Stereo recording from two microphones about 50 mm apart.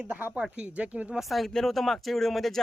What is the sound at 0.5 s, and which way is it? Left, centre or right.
Speech, right.